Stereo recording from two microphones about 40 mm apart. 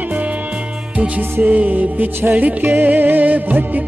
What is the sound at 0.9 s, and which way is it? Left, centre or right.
Music, right.